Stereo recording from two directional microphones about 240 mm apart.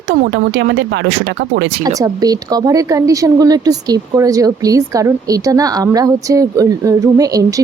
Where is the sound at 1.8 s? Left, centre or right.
Centre.